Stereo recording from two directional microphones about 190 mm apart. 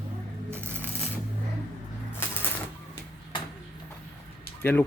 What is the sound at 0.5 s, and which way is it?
Coin, 10° right (ahead or behind).